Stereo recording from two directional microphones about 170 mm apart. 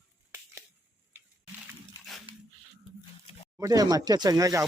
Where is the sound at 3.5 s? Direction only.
20° right (ahead or behind).